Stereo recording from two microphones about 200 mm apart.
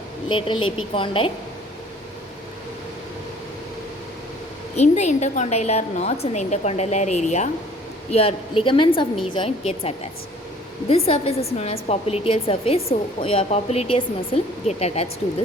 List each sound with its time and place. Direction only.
0.3 s a woman's voice: 25° left (ahead or behind)
4.8 s a woman's voice: 35° left (ahead or behind)